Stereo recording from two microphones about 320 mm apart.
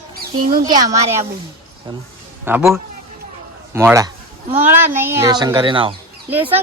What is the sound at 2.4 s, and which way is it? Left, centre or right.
A child's voice, centre.